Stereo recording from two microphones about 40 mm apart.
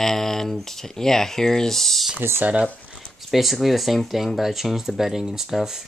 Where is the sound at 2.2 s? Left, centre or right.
Right.